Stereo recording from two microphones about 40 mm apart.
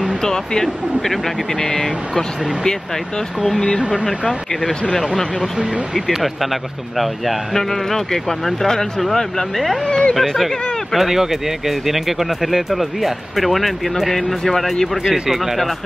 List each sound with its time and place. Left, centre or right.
0.2 s speech: centre
5.9 s speech: centre
9.8 s speech: left
10.3 s speech: centre
14.4 s speech: centre
15.2 s speech: centre